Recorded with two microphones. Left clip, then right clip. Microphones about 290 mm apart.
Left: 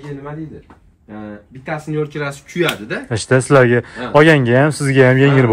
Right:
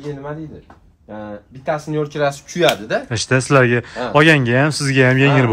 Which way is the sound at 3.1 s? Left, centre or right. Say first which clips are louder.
Left 4 dB; centre.